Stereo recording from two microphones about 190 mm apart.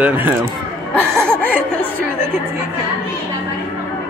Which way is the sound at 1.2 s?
10° left (ahead or behind).